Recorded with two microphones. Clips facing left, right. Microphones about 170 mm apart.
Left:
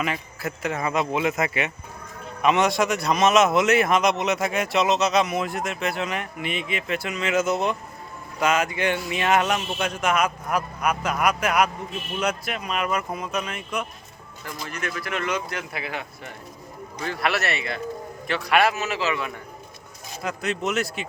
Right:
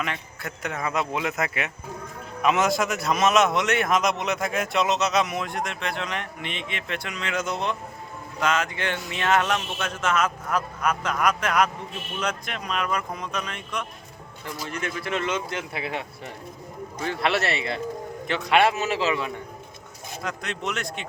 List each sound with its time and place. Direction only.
0.0 s a man's voice: 5° left (ahead or behind)
14.7 s speech: 25° right (ahead or behind)
20.2 s a man's voice: 5° left (ahead or behind)